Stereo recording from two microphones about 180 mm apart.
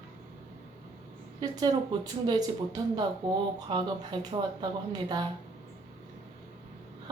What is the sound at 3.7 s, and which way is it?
Speech, 25° right (ahead or behind).